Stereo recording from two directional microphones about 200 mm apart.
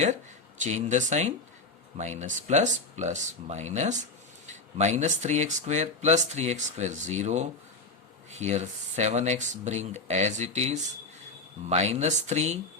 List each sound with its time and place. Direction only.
0.6 s speech: 35° right (ahead or behind)